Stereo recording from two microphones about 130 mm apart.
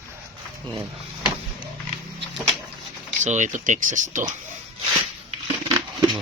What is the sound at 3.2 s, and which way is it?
Speech, 70° right (ahead or behind).